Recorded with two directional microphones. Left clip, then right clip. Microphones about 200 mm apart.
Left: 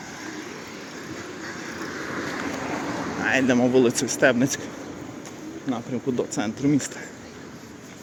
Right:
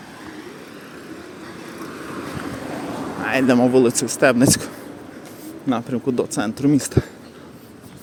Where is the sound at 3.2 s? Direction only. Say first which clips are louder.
Right 4 dB; 20° right (ahead or behind).